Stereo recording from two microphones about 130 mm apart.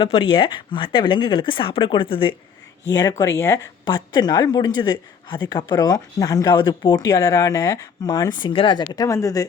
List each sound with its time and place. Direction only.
0.0 s speech: 40° left (ahead or behind)
2.9 s speech: 30° left (ahead or behind)